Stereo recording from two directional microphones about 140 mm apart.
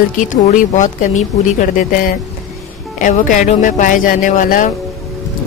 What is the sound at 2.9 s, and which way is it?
Speech, 65° left (ahead or behind).